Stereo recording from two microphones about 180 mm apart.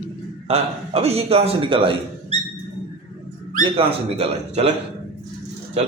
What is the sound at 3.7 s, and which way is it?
Speech, 30° right (ahead or behind).